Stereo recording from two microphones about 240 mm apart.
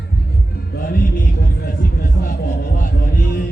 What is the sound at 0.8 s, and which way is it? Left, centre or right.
Music, left.